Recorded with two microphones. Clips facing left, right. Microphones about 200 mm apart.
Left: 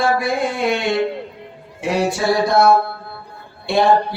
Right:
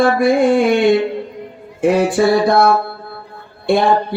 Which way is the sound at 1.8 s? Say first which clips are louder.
Right 6 dB; 50° right (ahead or behind).